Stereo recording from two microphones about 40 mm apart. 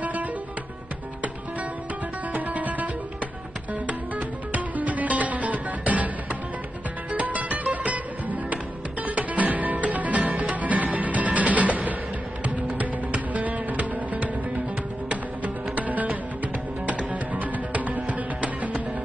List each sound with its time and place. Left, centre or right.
0.0 s music: right
2.3 s music: right
4.5 s music: right
7.1 s music: right